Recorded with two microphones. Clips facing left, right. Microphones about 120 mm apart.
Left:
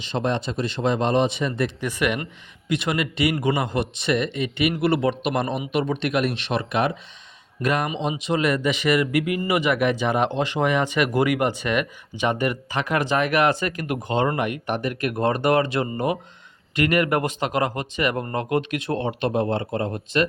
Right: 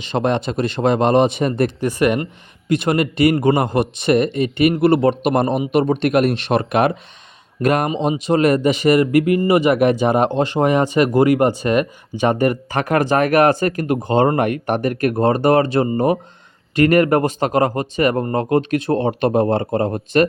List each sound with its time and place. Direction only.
0.0 s a man's voice: 60° right (ahead or behind)